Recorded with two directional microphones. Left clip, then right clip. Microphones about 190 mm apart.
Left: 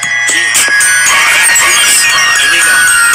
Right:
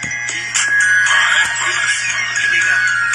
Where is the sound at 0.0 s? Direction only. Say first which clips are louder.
Left 11 dB; 40° left (ahead or behind).